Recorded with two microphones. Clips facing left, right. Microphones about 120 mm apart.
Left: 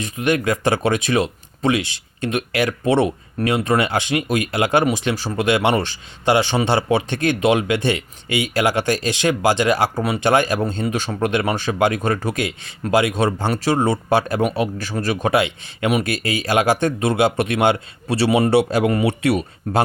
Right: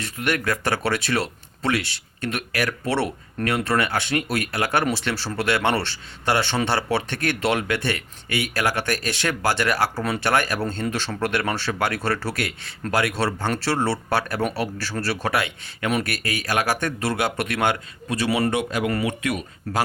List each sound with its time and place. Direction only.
0.0 s speech: 20° left (ahead or behind)